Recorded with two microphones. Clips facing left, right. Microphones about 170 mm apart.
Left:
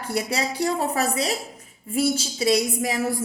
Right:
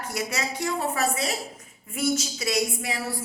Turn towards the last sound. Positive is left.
turn(degrees=40)  # may be behind; listen again after turning